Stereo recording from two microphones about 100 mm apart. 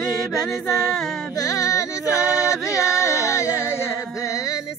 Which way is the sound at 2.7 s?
30° left (ahead or behind).